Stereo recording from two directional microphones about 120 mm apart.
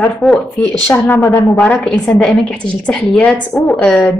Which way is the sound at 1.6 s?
5° left (ahead or behind).